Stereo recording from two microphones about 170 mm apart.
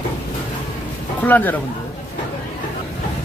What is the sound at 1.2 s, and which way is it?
Speech, 10° left (ahead or behind).